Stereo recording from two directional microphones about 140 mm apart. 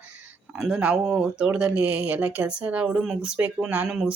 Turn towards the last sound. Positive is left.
turn(degrees=-5)  # may be behind; listen again after turning